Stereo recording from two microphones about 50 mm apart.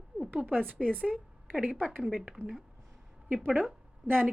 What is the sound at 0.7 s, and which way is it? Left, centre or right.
Speech, right.